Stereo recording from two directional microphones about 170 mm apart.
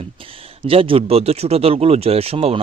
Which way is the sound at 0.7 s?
35° right (ahead or behind).